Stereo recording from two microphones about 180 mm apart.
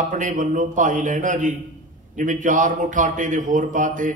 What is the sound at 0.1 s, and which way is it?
Speech, 45° right (ahead or behind).